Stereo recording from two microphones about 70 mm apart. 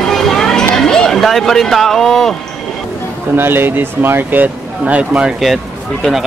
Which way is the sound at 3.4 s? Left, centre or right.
Right.